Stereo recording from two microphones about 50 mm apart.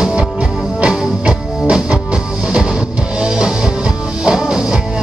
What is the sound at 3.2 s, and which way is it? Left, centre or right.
Music, centre.